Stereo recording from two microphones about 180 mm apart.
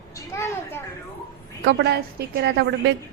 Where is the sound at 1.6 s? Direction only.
75° right (ahead or behind).